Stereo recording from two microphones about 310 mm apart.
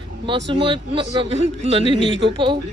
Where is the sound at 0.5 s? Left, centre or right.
Centre.